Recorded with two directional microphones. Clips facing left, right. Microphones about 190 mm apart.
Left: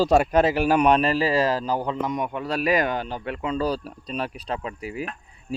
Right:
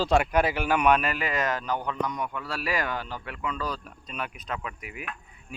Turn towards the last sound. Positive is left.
turn(degrees=35)  # may be behind; listen again after turning